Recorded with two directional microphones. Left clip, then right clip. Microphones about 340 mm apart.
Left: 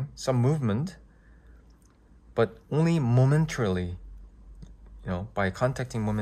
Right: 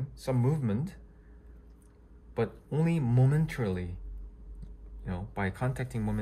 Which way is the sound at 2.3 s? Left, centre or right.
Centre.